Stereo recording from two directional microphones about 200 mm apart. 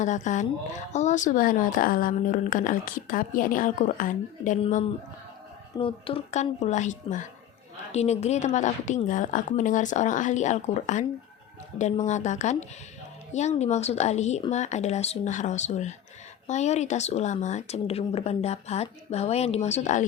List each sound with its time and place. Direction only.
0.0 s a woman's voice: 40° left (ahead or behind)
5.7 s a woman's voice: 25° left (ahead or behind)